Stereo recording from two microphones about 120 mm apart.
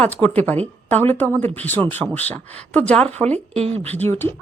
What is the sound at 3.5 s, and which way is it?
Speech, 60° right (ahead or behind).